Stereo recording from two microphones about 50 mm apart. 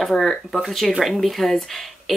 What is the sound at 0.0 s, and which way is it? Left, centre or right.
Speech, centre.